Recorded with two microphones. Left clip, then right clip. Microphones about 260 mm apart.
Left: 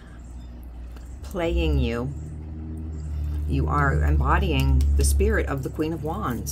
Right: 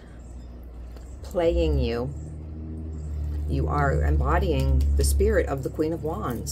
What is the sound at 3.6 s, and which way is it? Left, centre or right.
Speech, left.